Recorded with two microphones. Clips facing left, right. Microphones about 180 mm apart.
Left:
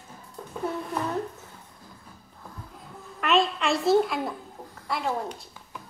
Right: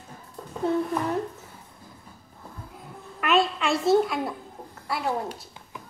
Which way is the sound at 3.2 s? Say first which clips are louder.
Right 1 dB; centre (ahead or behind).